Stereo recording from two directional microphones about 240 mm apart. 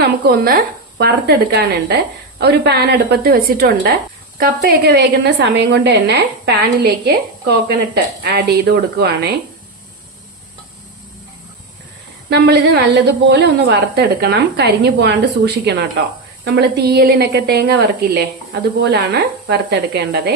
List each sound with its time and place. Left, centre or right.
0.0 s a woman's voice: right
12.3 s a woman's voice: right